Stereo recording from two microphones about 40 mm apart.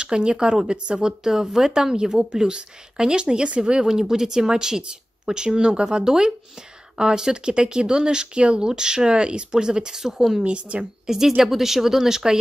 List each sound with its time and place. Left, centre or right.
0.0 s speech: right
3.8 s speech: centre
10.4 s speech: right
11.1 s speech: centre